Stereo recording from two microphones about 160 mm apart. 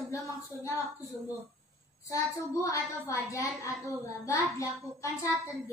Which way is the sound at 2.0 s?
20° left (ahead or behind).